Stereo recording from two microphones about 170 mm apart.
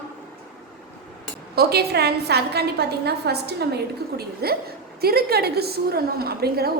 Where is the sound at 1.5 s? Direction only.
65° right (ahead or behind).